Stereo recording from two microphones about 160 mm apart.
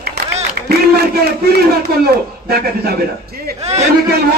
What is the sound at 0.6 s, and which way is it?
A man's voice, 80° right.